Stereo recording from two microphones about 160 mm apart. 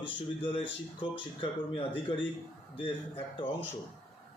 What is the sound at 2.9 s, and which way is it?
Speech, 35° left (ahead or behind).